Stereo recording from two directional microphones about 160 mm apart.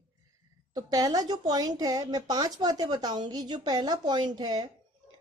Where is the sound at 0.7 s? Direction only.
25° right (ahead or behind).